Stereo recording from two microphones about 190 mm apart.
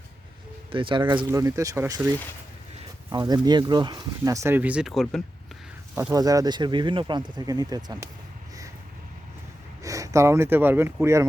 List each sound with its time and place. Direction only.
0.7 s speech: 25° right (ahead or behind)
3.1 s speech: 20° right (ahead or behind); by 5.2 s centre (ahead or behind)
5.9 s speech: 15° right (ahead or behind)
9.8 s speech: 15° right (ahead or behind)